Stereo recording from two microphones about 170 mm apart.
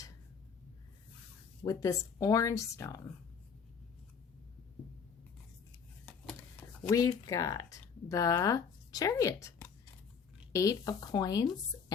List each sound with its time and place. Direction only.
1.6 s speech: 20° left (ahead or behind)
6.8 s speech: 20° left (ahead or behind)